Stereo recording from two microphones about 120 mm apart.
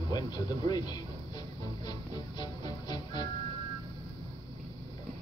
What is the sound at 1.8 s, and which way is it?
Music, 35° left (ahead or behind).